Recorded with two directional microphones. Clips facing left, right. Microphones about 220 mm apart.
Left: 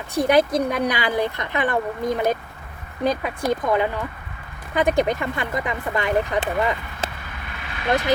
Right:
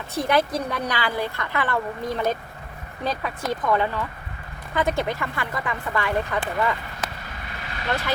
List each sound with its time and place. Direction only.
0.1 s a woman's voice: 15° left (ahead or behind)